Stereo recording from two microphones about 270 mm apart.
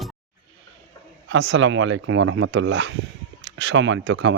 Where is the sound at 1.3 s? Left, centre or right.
Right.